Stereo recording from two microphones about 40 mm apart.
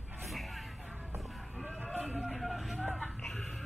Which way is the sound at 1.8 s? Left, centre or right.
Right.